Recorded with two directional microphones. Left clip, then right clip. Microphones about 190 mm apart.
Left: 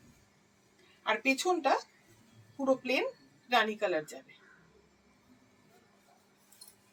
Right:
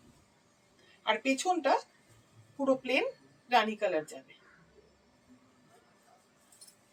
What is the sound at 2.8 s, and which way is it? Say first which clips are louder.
Speech: right 1 dB; 15° right (ahead or behind).